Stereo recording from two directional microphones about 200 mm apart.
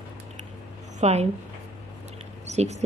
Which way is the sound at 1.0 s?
30° right (ahead or behind).